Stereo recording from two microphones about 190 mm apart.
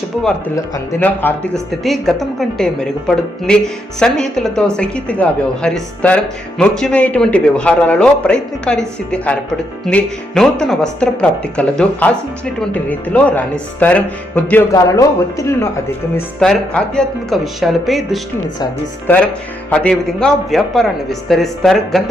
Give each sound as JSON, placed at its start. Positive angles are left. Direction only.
{"t": 0.5, "sound": "speech", "side_deg": 15}
{"t": 16.4, "sound": "speech", "side_deg": 5}